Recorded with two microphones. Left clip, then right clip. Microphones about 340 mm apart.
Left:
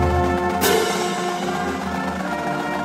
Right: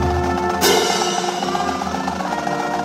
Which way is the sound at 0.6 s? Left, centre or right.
Right.